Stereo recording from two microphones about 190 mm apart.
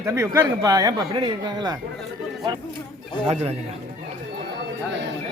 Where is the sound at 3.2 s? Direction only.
30° right (ahead or behind).